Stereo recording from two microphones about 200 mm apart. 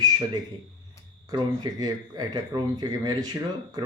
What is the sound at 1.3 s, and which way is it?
Speech, 20° right (ahead or behind).